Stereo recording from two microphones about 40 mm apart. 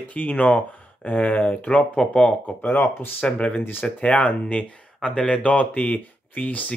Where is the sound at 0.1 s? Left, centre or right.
Left.